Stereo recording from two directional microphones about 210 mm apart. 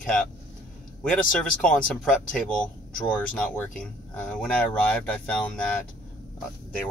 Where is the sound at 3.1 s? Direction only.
5° left (ahead or behind).